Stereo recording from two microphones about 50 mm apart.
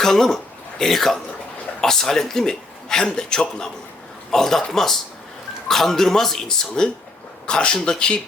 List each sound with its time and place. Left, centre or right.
0.0 s a man's voice: centre
7.4 s a man's voice: centre